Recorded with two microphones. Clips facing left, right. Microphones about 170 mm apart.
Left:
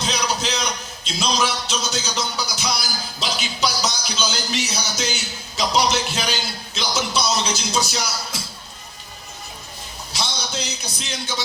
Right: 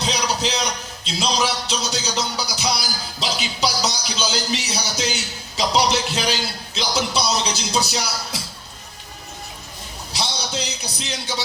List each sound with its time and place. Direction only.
0.0 s a sound: 35° right (ahead or behind)
1.2 s music: 35° right (ahead or behind)
10.1 s a man's voice: 35° right (ahead or behind)